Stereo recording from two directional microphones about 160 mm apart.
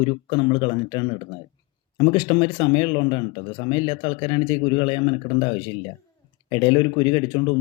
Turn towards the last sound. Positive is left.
turn(degrees=30)  # may be behind; listen again after turning